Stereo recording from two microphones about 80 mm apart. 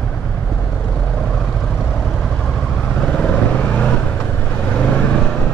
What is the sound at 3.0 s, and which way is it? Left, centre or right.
Vehicle, centre.